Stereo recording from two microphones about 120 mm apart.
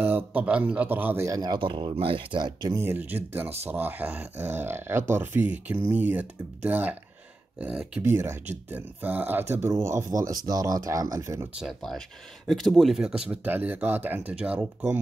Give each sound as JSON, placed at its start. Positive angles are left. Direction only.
{"t": 0.0, "sound": "speech", "side_deg": -15}
{"t": 2.8, "sound": "speech", "side_deg": -15}
{"t": 11.5, "sound": "speech", "side_deg": 0}